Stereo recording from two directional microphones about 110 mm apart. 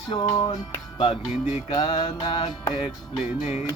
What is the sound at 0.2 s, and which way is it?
Music, 35° left (ahead or behind).